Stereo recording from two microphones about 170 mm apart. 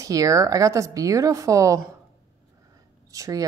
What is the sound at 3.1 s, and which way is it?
Speech, 20° right (ahead or behind).